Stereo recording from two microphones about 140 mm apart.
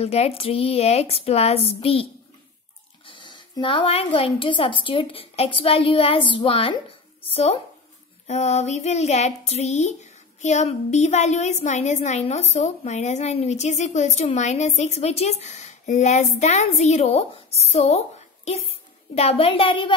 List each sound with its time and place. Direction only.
0.0 s a woman's voice: 50° left (ahead or behind)
3.1 s a woman's voice: 35° left (ahead or behind)